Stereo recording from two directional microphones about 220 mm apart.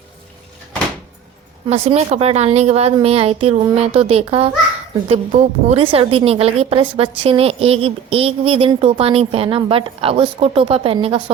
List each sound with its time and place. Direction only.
1.6 s a woman's voice: 25° right (ahead or behind)